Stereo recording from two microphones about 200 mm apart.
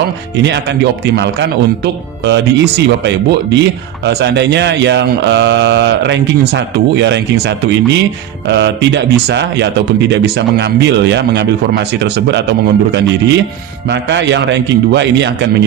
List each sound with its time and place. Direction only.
0.4 s speech: 60° right (ahead or behind)